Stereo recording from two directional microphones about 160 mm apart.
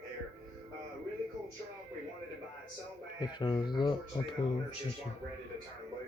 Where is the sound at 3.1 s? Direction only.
25° left (ahead or behind).